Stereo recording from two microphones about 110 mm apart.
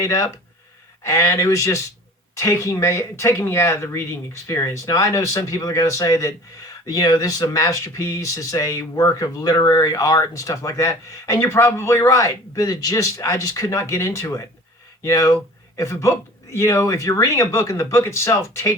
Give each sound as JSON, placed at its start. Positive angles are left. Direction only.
{"t": 0.0, "sound": "speech", "side_deg": 30}